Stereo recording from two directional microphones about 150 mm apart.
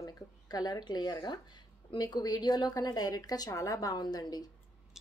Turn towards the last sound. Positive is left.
turn(degrees=25)  # may be behind; listen again after turning